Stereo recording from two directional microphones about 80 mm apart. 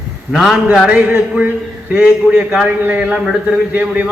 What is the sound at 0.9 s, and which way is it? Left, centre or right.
A man's voice, centre.